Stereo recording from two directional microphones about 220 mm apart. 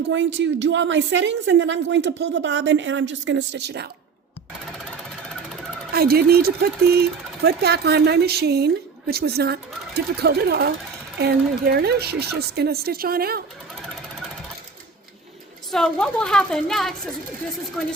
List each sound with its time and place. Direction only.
0.1 s a woman's voice: 55° right (ahead or behind)
5.9 s speech: 45° right (ahead or behind)
15.7 s a woman's voice: 5° left (ahead or behind)